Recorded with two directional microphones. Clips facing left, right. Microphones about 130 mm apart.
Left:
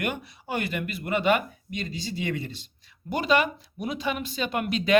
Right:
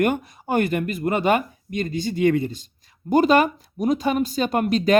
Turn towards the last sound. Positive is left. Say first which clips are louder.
# right 6 dB
turn(degrees=-40)  # may be behind; listen again after turning